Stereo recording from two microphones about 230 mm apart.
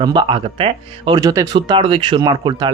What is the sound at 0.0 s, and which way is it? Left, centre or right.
Speech, centre.